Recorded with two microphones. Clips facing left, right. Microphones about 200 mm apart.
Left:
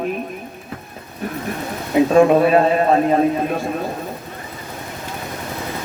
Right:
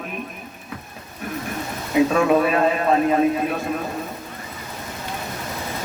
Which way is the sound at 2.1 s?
35° left (ahead or behind).